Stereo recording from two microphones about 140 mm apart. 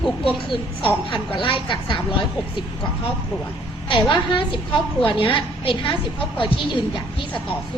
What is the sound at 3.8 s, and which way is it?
A woman's voice, 35° left (ahead or behind).